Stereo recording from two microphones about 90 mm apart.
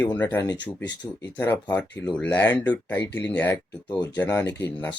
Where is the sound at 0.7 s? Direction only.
50° left (ahead or behind).